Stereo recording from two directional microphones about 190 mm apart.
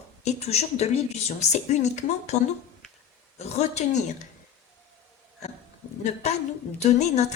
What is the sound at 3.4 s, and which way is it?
Speech, 35° left (ahead or behind).